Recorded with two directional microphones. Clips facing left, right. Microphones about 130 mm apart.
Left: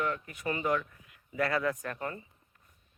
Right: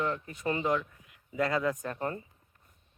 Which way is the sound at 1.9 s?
30° right (ahead or behind).